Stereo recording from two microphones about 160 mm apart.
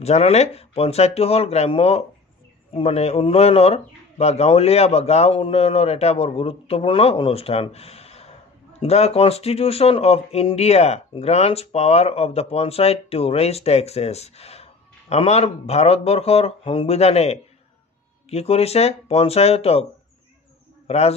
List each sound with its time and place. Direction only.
0.0 s a man's voice: 40° left (ahead or behind)